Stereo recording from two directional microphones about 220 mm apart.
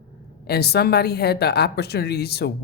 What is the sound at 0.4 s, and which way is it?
A woman's voice, 45° left (ahead or behind).